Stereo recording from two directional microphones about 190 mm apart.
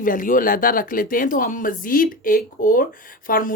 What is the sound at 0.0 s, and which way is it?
Speech, 45° left (ahead or behind).